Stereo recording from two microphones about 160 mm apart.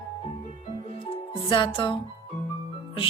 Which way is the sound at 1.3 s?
30° left (ahead or behind).